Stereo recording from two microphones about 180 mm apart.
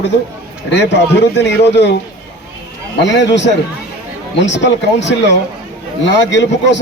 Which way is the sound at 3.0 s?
80° left.